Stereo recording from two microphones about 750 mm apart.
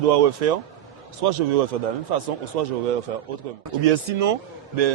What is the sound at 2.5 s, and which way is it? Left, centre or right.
Speech, right.